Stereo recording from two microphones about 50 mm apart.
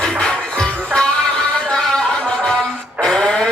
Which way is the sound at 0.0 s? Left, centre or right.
Centre.